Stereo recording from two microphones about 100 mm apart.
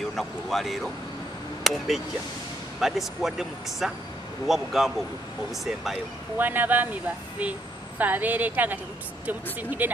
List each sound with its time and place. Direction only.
0.1 s speech: centre (ahead or behind)
6.3 s speech: 20° right (ahead or behind)